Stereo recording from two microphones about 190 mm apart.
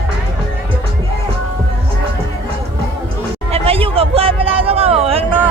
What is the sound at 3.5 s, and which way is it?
Speech, 30° right (ahead or behind).